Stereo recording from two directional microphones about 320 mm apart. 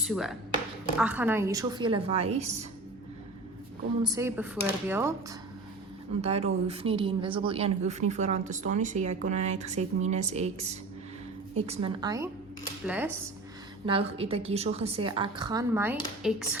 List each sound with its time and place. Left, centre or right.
0.0 s a woman's voice: centre; by 2.6 s right
4.0 s a woman's voice: centre
6.2 s a woman's voice: centre
12.9 s cutlery: centre
13.8 s a woman's voice: centre
16.2 s cutlery: centre